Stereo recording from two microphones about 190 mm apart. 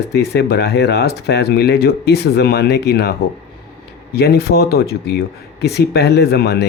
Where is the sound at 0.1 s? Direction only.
60° left (ahead or behind).